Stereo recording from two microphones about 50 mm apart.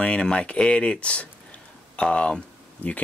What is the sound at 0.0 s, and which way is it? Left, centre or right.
Speech, left.